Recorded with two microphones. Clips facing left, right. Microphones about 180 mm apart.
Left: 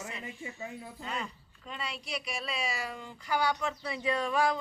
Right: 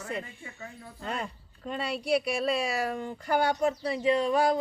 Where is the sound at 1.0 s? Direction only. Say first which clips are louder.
Right 5 dB; 50° right (ahead or behind); by 4.4 s 30° right (ahead or behind).